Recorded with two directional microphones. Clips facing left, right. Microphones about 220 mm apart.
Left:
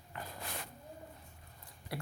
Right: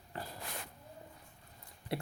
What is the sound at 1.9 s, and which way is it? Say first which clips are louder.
Speech: right 5 dB; 25° right (ahead or behind).